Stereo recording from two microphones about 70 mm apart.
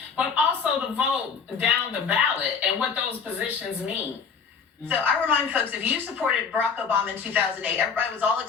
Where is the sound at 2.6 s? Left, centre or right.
Centre.